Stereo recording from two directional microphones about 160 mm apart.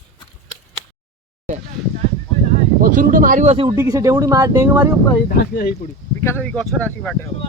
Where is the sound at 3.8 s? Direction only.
20° right (ahead or behind).